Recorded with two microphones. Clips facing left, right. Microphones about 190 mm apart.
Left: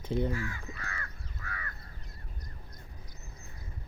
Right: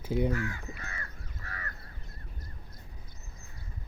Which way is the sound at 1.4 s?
35° right (ahead or behind).